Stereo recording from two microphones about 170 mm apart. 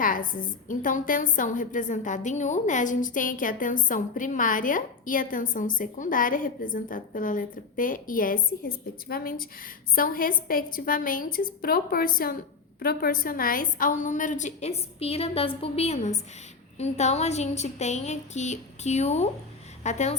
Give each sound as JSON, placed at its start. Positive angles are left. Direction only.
{"t": 0.0, "sound": "a woman's voice", "side_deg": 55}